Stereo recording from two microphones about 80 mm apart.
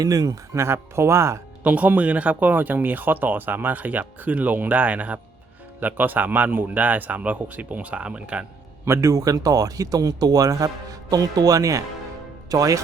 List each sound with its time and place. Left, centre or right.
0.0 s speech: right
0.6 s speech: right
1.6 s speech: centre
8.8 s speech: right